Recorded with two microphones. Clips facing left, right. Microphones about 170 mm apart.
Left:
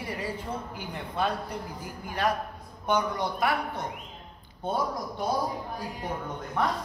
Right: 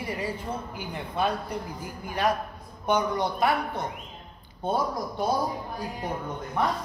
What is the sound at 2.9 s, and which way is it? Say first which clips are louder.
Speech: right 2 dB; 25° right (ahead or behind).